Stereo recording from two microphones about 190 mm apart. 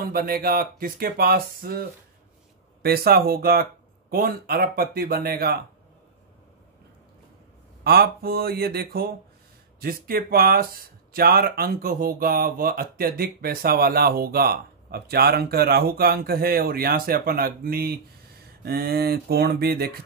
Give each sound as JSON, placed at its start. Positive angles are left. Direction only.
{"t": 0.0, "sound": "speech", "side_deg": -50}
{"t": 7.8, "sound": "speech", "side_deg": -55}
{"t": 18.6, "sound": "a sound", "side_deg": -55}